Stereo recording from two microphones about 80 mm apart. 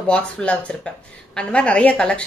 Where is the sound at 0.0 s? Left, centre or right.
Centre.